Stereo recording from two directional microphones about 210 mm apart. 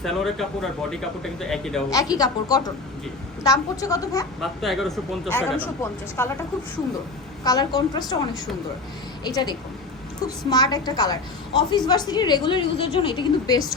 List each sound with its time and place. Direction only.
0.0 s speech: centre (ahead or behind)
1.9 s a woman's voice: 15° left (ahead or behind)
4.4 s a woman's voice: centre (ahead or behind)
7.4 s a woman's voice: 20° left (ahead or behind)
9.2 s a woman's voice: 20° left (ahead or behind)